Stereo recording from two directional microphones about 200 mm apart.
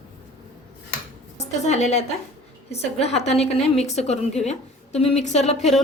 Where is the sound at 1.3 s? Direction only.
35° left (ahead or behind).